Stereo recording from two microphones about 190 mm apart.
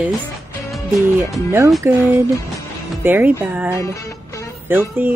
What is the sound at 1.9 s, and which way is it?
Speech, 15° right (ahead or behind).